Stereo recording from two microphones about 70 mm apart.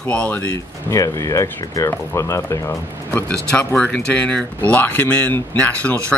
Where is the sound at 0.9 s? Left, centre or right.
Left.